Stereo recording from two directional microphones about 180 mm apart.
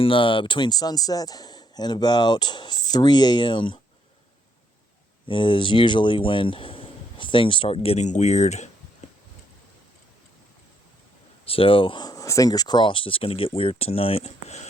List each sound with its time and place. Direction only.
0.0 s speech: 30° left (ahead or behind)
5.3 s speech: 25° left (ahead or behind)
9.0 s a sound: 40° left (ahead or behind)
11.4 s speech: 30° left (ahead or behind)